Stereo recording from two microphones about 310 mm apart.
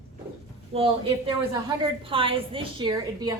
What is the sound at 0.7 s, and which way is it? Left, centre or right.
A woman's voice, centre.